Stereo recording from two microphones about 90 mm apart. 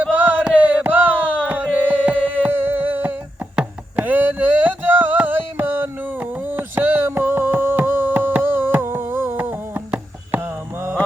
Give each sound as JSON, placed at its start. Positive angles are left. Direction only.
{"t": 0.0, "sound": "music", "side_deg": -15}